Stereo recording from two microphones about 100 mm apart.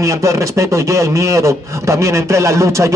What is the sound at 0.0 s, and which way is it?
Speech, 30° right (ahead or behind).